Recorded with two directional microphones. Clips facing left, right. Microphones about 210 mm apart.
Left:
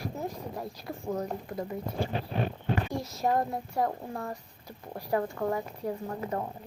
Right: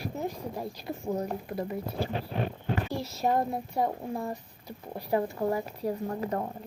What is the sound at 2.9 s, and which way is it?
Speech, 30° right (ahead or behind).